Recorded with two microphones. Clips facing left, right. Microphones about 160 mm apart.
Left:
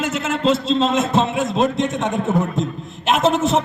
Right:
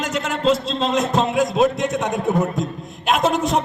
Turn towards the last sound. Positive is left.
turn(degrees=0)  # may be behind; listen again after turning